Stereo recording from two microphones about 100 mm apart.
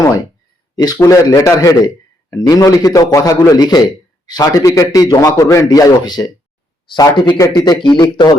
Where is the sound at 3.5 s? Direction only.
45° left (ahead or behind).